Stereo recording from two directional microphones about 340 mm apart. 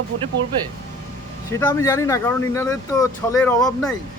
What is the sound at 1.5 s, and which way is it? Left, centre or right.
Speech, centre.